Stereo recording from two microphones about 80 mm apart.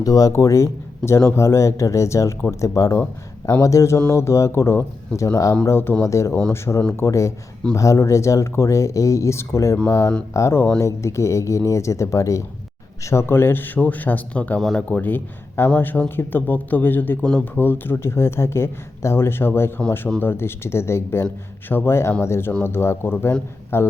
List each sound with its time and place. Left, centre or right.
0.0 s speech: left